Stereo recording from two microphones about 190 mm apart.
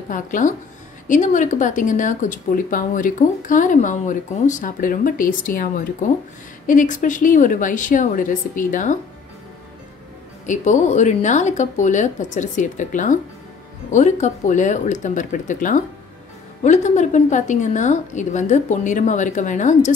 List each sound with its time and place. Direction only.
0.1 s speech: 45° left (ahead or behind)
10.4 s a woman's voice: 40° left (ahead or behind)